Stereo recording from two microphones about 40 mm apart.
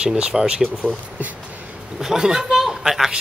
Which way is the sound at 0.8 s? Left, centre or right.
Right.